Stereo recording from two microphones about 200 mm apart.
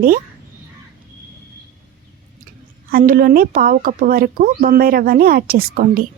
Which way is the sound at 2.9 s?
45° right (ahead or behind).